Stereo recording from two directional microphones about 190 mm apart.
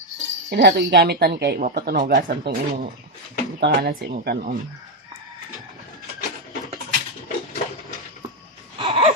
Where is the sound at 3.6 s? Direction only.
60° right (ahead or behind).